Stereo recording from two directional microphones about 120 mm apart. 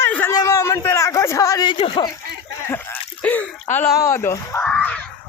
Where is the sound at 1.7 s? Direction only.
45° left (ahead or behind).